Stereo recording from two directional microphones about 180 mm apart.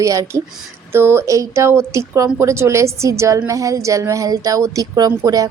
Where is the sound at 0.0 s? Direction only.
20° right (ahead or behind).